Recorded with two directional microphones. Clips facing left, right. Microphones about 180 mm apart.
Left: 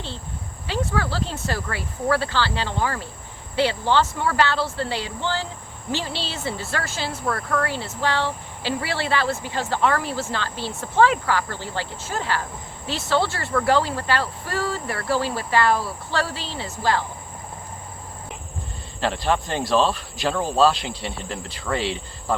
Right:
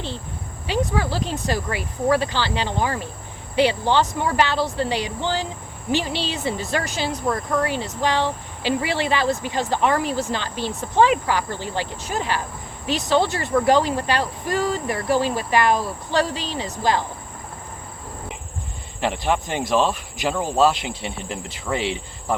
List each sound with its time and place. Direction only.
0.7 s speech: 15° right (ahead or behind)
18.9 s speech: 15° right (ahead or behind)